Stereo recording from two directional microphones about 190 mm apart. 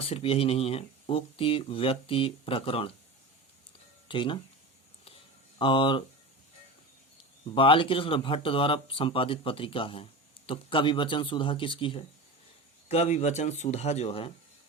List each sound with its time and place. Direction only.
0.0 s speech: 30° left (ahead or behind)
4.1 s speech: 25° left (ahead or behind)
5.5 s speech: 25° left (ahead or behind)
7.5 s speech: 25° left (ahead or behind)